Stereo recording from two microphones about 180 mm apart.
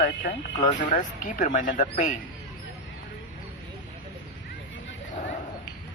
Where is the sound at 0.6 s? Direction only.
45° left (ahead or behind).